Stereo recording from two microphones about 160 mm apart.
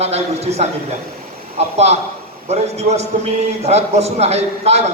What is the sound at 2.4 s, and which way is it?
A man's voice, 40° right (ahead or behind).